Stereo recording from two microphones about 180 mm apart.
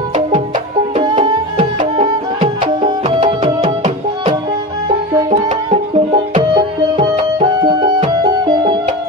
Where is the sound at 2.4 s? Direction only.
30° right (ahead or behind).